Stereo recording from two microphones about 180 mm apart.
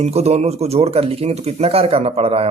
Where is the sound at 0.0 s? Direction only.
35° right (ahead or behind).